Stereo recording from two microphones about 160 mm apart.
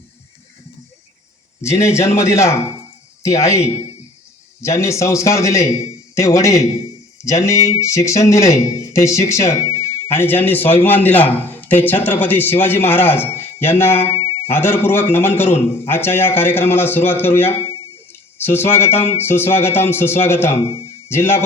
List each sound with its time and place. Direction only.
1.6 s a man's voice: 15° left (ahead or behind)